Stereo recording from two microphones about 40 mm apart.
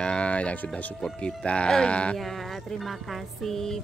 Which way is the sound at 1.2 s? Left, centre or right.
Left.